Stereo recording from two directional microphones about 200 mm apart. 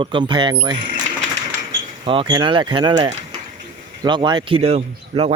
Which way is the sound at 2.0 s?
25° right (ahead or behind).